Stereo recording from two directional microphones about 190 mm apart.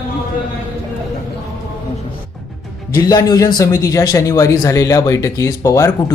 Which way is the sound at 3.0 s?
20° left (ahead or behind).